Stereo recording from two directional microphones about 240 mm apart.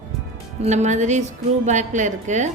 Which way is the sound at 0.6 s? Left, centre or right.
Right.